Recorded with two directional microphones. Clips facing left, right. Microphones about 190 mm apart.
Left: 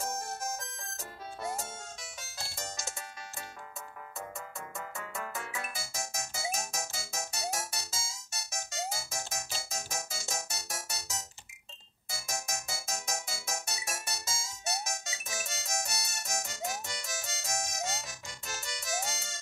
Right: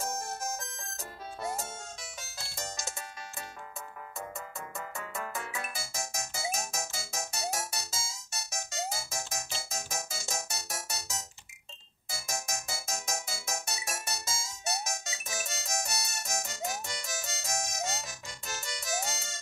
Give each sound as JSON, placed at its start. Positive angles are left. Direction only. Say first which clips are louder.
{"t": 0.0, "sound": "music", "louder": "right 1 dB", "side_deg": -40}
{"t": 2.1, "sound": "music", "louder": "left 1 dB", "side_deg": -40}
{"t": 4.7, "sound": "music", "louder": "right 1 dB", "side_deg": -40}